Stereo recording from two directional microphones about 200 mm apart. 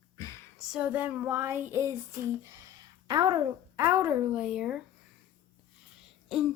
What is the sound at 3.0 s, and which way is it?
Speech, 20° right (ahead or behind).